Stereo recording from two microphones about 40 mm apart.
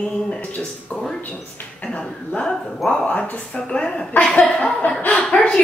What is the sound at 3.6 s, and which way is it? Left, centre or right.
Speech, left.